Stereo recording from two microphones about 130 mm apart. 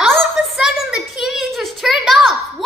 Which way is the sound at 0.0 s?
Centre (ahead or behind).